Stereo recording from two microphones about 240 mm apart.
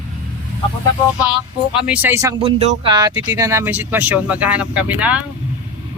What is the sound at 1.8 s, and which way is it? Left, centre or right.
Speech, centre.